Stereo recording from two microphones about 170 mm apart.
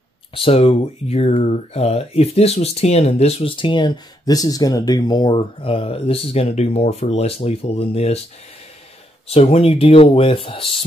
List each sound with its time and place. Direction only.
0.3 s speech: 35° left (ahead or behind)
9.3 s speech: 35° left (ahead or behind)